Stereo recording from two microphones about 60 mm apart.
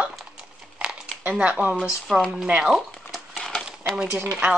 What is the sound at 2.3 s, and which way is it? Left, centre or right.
Speech, centre.